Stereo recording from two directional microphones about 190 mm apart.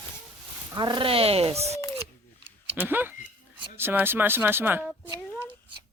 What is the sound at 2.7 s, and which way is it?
Speech, 10° right (ahead or behind).